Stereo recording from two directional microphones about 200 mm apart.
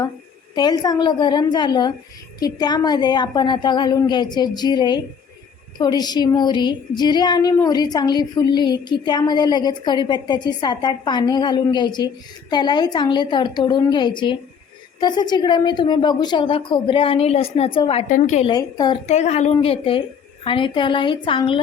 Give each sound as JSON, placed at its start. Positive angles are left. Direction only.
{"t": 0.5, "sound": "speech", "side_deg": 20}
{"t": 18.4, "sound": "speech", "side_deg": 20}
{"t": 19.0, "sound": "a woman's voice", "side_deg": 35}